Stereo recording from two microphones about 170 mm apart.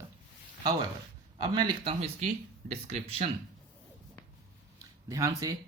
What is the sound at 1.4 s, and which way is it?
Speech, 25° right (ahead or behind).